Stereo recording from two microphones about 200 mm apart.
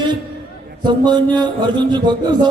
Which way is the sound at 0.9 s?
20° right (ahead or behind).